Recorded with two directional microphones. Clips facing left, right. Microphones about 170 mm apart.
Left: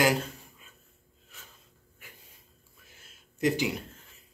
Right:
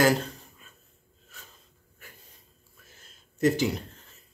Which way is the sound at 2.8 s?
10° left (ahead or behind).